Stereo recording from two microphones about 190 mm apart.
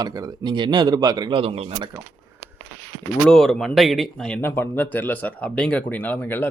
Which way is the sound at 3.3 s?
Centre (ahead or behind).